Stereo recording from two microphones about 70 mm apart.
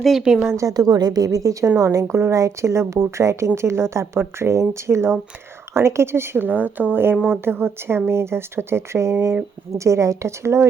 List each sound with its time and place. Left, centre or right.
0.0 s a woman's voice: centre
0.4 s a woman's voice: right
0.7 s a woman's voice: right